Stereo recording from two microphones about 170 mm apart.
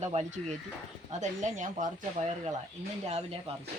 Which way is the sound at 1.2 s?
45° right (ahead or behind).